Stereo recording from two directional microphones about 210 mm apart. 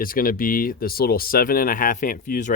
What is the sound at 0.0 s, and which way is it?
Speech, 40° left (ahead or behind).